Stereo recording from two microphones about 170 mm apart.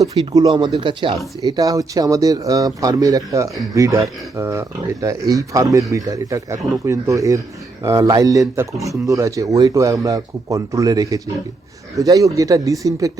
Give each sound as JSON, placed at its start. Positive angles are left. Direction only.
{"t": 0.0, "sound": "speech", "side_deg": -20}